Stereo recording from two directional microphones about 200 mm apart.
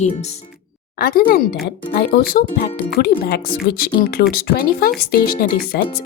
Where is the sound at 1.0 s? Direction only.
45° left (ahead or behind).